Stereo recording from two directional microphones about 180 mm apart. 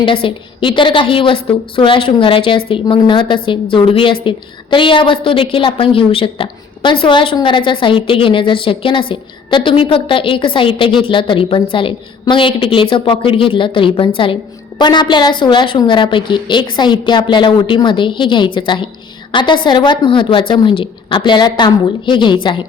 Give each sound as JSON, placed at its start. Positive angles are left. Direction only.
{"t": 0.0, "sound": "a woman's voice", "side_deg": 30}